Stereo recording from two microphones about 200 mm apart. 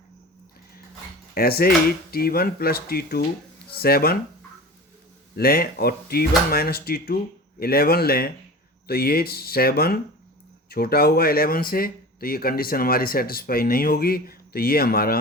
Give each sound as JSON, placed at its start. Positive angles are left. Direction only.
{"t": 1.3, "sound": "speech", "side_deg": 50}
{"t": 5.4, "sound": "speech", "side_deg": 50}